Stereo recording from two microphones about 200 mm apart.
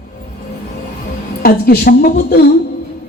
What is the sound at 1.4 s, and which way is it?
A woman's voice, 50° left (ahead or behind).